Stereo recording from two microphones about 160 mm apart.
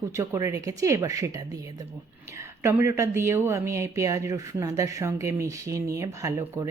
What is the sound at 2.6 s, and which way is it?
Speech, 15° right (ahead or behind).